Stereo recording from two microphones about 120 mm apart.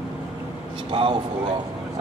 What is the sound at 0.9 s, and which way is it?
Speech, 45° right (ahead or behind).